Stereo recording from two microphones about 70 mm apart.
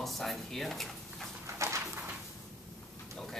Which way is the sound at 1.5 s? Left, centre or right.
Right.